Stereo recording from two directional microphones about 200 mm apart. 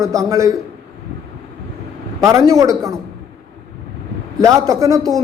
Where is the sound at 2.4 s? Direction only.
15° right (ahead or behind).